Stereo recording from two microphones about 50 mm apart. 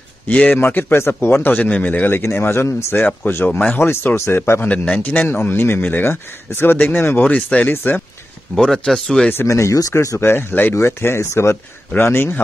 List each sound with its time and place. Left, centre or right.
0.3 s a man's voice: left
0.7 s a man's voice: left
0.9 s speech: left
1.3 s a man's voice: left
2.0 s speech: left
2.9 s a man's voice: left
3.7 s speech: left
4.6 s a man's voice: left
5.3 s speech: left
7.4 s a man's voice: left
8.6 s speech: centre
9.5 s speech: left
12.0 s speech: left